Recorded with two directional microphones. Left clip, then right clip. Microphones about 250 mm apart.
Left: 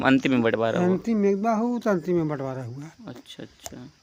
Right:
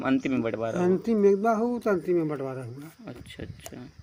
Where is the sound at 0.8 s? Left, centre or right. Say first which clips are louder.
Right 1 dB; centre; by 2.9 s left.